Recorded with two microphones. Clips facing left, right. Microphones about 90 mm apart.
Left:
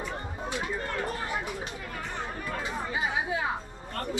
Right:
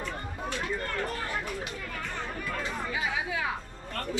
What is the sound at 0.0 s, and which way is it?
Chatter, 15° left (ahead or behind).